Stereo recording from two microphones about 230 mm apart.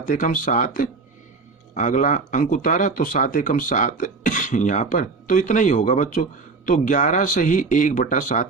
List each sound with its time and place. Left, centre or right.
0.0 s speech: left